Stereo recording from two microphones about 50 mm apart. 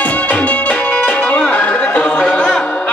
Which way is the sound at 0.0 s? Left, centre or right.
Left.